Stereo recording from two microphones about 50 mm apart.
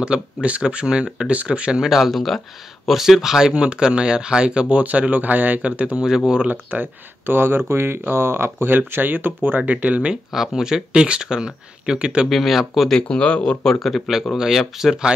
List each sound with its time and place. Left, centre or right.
0.0 s speech: right
1.8 s speech: centre; by 5.9 s right
5.9 s speech: centre
6.5 s speech: right
8.7 s speech: right
9.6 s speech: right
10.3 s speech: centre
12.3 s speech: centre
12.9 s speech: left
13.7 s speech: centre